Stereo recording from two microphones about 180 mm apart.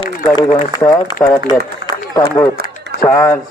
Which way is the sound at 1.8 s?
70° left (ahead or behind).